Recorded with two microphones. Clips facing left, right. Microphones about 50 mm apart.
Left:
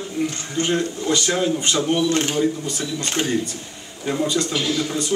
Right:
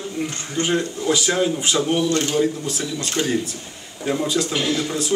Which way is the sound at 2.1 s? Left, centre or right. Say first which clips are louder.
Even; left.